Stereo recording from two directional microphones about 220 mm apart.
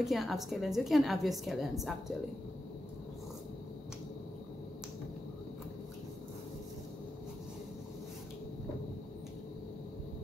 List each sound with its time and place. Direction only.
0.0 s a woman's voice: centre (ahead or behind)